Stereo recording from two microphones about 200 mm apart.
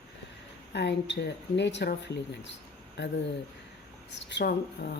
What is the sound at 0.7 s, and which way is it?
Speech, 60° left (ahead or behind).